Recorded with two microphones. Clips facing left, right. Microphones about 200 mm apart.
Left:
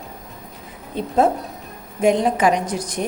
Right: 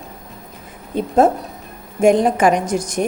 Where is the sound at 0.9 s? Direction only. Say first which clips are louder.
Right 3 dB; 50° right (ahead or behind).